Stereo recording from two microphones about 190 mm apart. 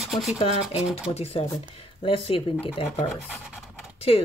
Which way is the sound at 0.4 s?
30° left (ahead or behind).